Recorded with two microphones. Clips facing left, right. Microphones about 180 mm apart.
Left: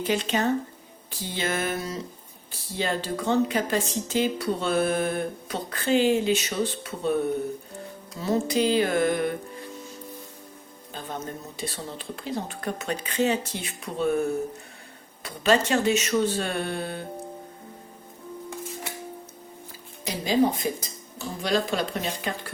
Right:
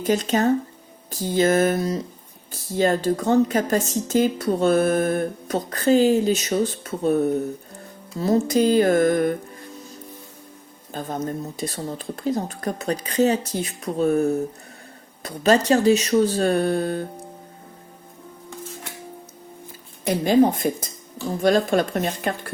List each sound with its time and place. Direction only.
0.0 s speech: 45° right (ahead or behind)
10.9 s speech: 45° right (ahead or behind)
20.1 s speech: 55° right (ahead or behind)